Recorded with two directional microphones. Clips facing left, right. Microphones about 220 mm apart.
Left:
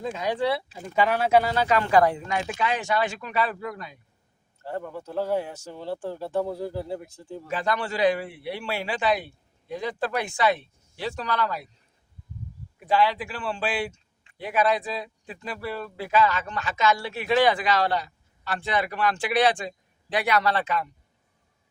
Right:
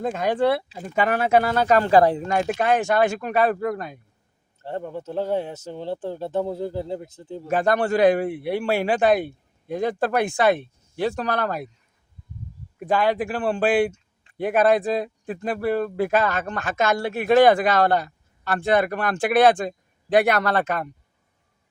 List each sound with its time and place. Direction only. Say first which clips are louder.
0.0 s speech: right 5 dB; 50° right (ahead or behind)
1.9 s speech: right 4 dB; 30° right (ahead or behind); by 4.0 s 50° right (ahead or behind)
4.6 s speech: right 3 dB; 25° right (ahead or behind)
7.4 s speech: right 7 dB; 50° right (ahead or behind)
12.8 s speech: right 2 dB; 50° right (ahead or behind)